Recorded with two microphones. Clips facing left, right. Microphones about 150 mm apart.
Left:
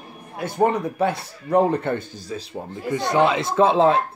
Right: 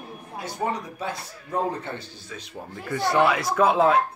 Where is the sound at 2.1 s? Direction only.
35° left (ahead or behind).